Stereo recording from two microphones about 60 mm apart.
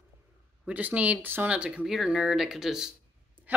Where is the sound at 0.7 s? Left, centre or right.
Right.